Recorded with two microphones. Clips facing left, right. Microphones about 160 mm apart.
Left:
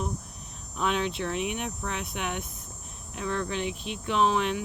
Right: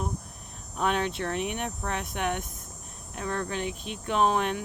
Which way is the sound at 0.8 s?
50° right (ahead or behind).